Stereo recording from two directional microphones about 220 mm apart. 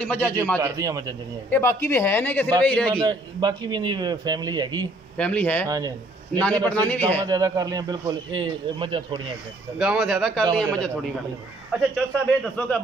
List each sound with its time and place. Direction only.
0.0 s a man's voice: 5° left (ahead or behind)
0.6 s a man's voice: 15° right (ahead or behind)
1.5 s a man's voice: 10° left (ahead or behind)
3.1 s a man's voice: 20° right (ahead or behind)
5.1 s a man's voice: 5° left (ahead or behind)
5.7 s speech: 15° right (ahead or behind)
6.4 s a man's voice: 5° left (ahead or behind)
7.2 s a man's voice: 15° right (ahead or behind)
9.8 s a man's voice: 5° right (ahead or behind)